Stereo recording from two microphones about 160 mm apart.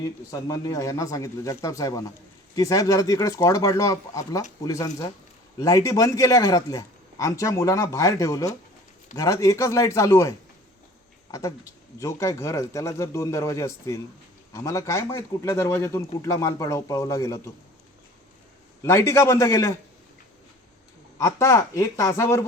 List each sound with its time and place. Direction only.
0.0 s a man's voice: 20° left (ahead or behind)
18.8 s a man's voice: 15° left (ahead or behind)
21.2 s a man's voice: 20° left (ahead or behind)